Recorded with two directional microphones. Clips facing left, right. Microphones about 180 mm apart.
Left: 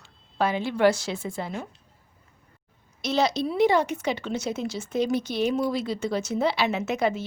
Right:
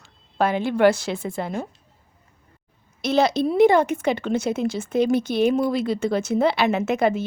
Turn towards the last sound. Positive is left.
turn(degrees=-55)  # may be behind; listen again after turning